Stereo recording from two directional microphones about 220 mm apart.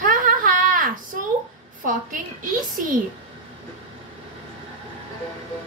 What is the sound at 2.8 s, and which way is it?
Speech, 40° right (ahead or behind).